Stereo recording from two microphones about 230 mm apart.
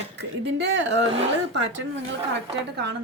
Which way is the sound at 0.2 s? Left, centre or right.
Right.